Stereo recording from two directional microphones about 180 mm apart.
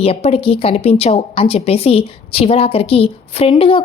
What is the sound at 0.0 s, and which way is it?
A woman's voice, 35° left (ahead or behind).